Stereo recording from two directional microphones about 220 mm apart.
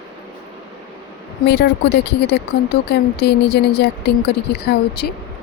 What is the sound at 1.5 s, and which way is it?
Speech, 50° left (ahead or behind).